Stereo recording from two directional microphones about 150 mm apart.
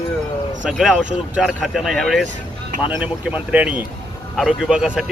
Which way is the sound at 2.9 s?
10° right (ahead or behind).